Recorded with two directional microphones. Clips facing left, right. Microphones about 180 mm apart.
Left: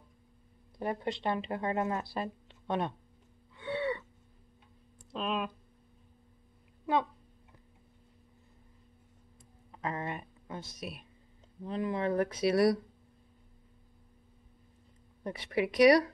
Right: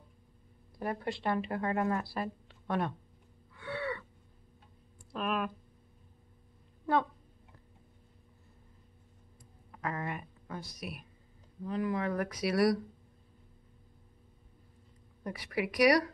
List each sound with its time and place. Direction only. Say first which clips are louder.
0.7 s speech: left 1 dB; 20° left (ahead or behind)
3.5 s gasp: left 4 dB; 20° left (ahead or behind)
5.1 s a sound: even; 20° left (ahead or behind)
9.7 s a sound: left 1 dB; 25° left (ahead or behind)
11.6 s speech: left 1 dB; 25° left (ahead or behind)
15.2 s speech: left 3 dB; 25° left (ahead or behind)